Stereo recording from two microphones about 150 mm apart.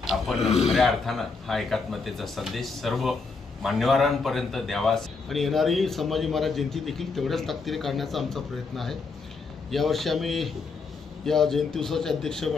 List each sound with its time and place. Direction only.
0.4 s a man's voice: 45° left (ahead or behind)
0.7 s a man's voice: centre (ahead or behind)